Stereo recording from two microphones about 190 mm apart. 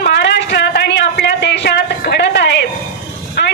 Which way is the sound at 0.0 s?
65° left (ahead or behind).